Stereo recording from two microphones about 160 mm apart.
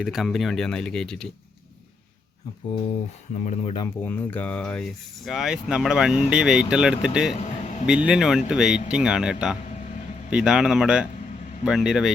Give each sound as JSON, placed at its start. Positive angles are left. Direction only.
{"t": 0.0, "sound": "speech", "side_deg": 0}
{"t": 3.3, "sound": "speech", "side_deg": 45}
{"t": 3.8, "sound": "speech", "side_deg": 10}
{"t": 7.3, "sound": "a sound", "side_deg": 45}
{"t": 7.9, "sound": "speech", "side_deg": -5}